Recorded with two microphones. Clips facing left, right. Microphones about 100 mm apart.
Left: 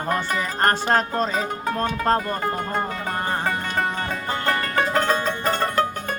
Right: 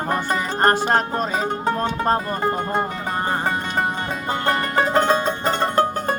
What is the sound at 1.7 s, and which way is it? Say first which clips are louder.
Speech: left 4 dB; 20° right (ahead or behind).